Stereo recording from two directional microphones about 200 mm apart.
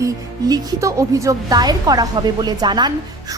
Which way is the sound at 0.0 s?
15° right (ahead or behind).